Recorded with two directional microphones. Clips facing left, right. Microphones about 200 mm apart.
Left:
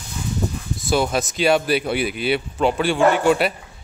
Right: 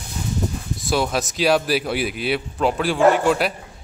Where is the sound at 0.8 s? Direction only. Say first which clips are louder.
Left 2 dB; centre (ahead or behind).